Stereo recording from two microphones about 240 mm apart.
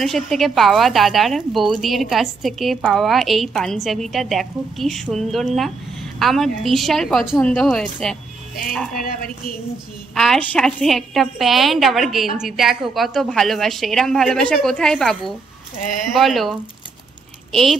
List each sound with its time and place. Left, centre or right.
0.0 s a woman's voice: centre
10.1 s a woman's voice: centre
15.8 s speech: left
16.1 s a woman's voice: centre